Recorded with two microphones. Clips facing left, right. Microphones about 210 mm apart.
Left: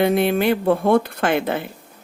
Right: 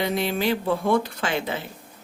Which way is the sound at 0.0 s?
55° left (ahead or behind).